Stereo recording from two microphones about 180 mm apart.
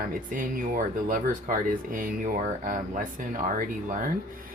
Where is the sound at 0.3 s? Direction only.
50° right (ahead or behind).